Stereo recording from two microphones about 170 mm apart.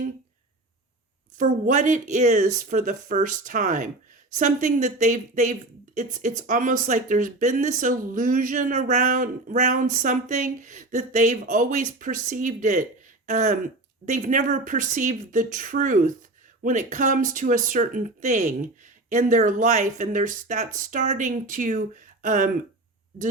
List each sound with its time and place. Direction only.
1.4 s speech: 50° right (ahead or behind)